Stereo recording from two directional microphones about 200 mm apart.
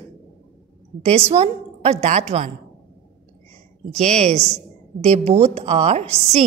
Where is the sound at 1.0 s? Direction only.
30° right (ahead or behind).